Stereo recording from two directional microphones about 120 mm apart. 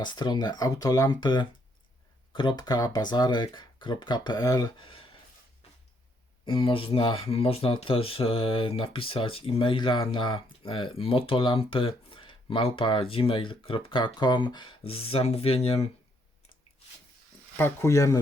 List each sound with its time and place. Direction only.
0.0 s speech: 40° left (ahead or behind)
4.8 s speech: 50° left (ahead or behind)
6.4 s speech: 45° left (ahead or behind)
17.6 s speech: 20° left (ahead or behind)